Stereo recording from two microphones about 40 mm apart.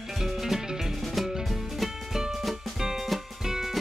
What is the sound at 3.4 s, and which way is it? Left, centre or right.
Music, centre.